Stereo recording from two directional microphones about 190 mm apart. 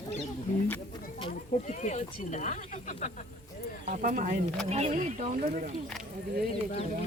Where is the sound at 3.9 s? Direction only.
50° right (ahead or behind).